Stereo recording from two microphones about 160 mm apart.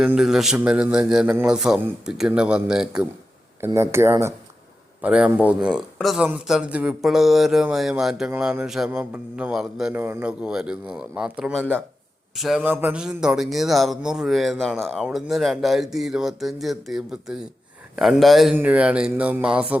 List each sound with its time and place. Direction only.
0.0 s speech: 5° right (ahead or behind)
3.8 s speech: 15° right (ahead or behind)